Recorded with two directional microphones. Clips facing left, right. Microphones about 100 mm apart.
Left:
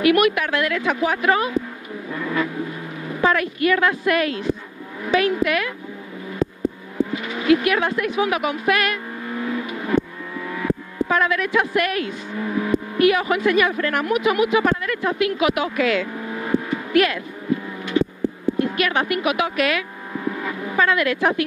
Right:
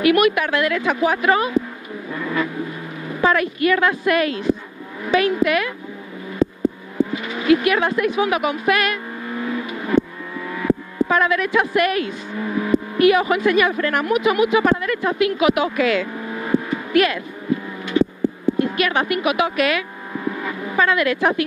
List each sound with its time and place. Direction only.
0.0 s a woman's voice: 15° right (ahead or behind)
2.1 s vehicle: 20° right (ahead or behind)
3.2 s a woman's voice: 15° right (ahead or behind)
7.1 s speech: 20° right (ahead or behind)
9.3 s vehicle: 25° right (ahead or behind)
10.4 s a woman's voice: 20° right (ahead or behind)
17.9 s a sound: 15° right (ahead or behind)
18.8 s a woman's voice: 15° right (ahead or behind)
20.1 s vehicle: 25° right (ahead or behind)